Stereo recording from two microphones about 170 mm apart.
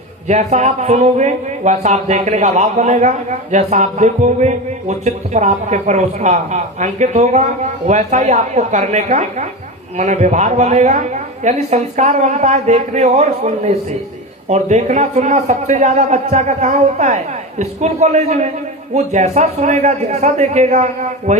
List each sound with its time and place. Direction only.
0.3 s a man's voice: 45° right (ahead or behind)